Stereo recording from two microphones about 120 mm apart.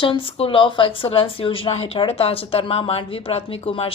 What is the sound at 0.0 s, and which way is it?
Speech, 45° left (ahead or behind).